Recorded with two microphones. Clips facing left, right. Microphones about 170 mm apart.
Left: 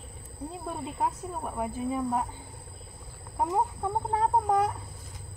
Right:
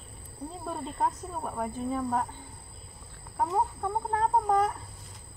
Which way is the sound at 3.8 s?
15° left (ahead or behind).